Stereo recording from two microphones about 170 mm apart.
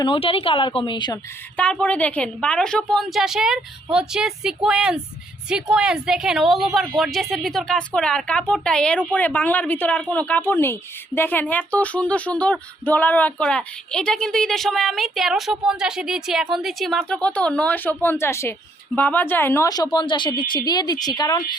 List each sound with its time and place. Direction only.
0.0 s a woman's voice: 30° left (ahead or behind)
1.5 s a woman's voice: 5° left (ahead or behind); by 21.4 s 25° left (ahead or behind)